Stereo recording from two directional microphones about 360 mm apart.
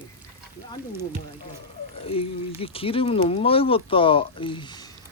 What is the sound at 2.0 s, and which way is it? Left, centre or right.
Speech, centre.